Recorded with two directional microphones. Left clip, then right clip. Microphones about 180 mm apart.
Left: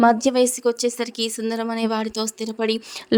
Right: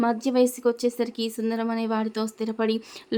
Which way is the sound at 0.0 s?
35° left (ahead or behind).